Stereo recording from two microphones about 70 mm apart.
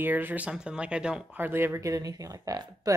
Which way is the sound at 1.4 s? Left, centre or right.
Right.